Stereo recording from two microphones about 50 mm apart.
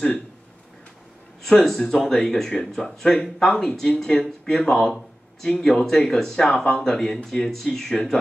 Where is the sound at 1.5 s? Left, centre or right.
Centre.